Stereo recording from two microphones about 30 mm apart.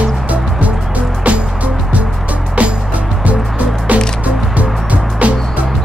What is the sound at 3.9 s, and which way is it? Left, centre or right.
Music, right.